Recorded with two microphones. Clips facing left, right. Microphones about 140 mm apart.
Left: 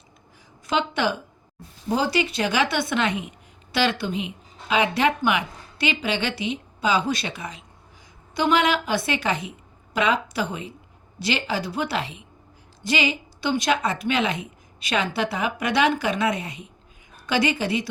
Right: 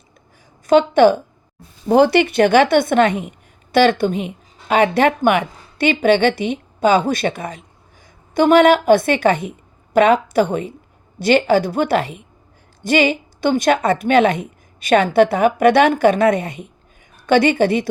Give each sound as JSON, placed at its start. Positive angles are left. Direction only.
{"t": 0.7, "sound": "a woman's voice", "side_deg": -50}
{"t": 1.9, "sound": "a woman's voice", "side_deg": -60}